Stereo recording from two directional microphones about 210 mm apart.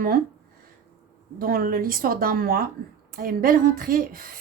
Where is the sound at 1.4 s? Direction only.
45° right (ahead or behind).